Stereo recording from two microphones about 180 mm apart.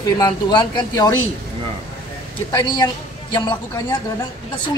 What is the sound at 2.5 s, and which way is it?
A man's voice, 20° left (ahead or behind).